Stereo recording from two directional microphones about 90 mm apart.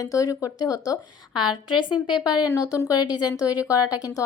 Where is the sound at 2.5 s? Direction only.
45° left (ahead or behind).